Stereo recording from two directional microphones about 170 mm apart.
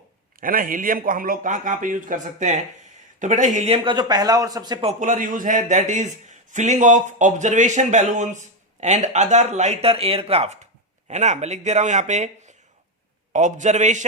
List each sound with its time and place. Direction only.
0.3 s a man's voice: 55° right (ahead or behind); by 3.9 s 40° right (ahead or behind)
3.9 s a man's voice: 25° right (ahead or behind)
4.9 s a man's voice: 45° right (ahead or behind)
13.3 s a man's voice: 45° right (ahead or behind)